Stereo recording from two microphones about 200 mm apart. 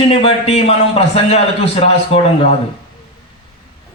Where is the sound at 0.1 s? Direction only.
30° left (ahead or behind).